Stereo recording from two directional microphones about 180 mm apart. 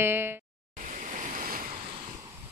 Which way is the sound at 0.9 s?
45° right (ahead or behind).